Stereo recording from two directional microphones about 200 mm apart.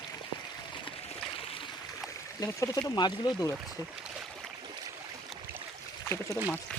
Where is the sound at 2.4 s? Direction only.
20° left (ahead or behind).